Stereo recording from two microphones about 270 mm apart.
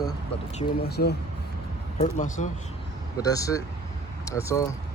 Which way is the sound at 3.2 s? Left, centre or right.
Centre.